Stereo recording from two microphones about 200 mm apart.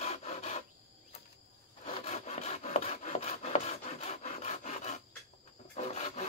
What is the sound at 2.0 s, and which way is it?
Rub, 35° left (ahead or behind).